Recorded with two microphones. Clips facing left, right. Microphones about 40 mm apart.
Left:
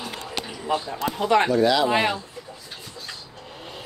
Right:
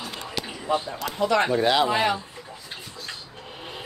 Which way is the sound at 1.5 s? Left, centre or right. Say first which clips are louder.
Left 1 dB; right.